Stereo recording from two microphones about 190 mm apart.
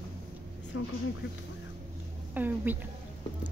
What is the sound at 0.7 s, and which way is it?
Speech, 90° left.